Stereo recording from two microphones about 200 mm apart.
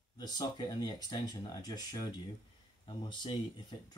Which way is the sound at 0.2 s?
20° left (ahead or behind).